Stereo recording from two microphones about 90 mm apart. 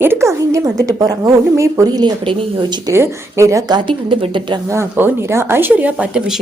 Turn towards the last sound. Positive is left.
turn(degrees=-10)  # may be behind; listen again after turning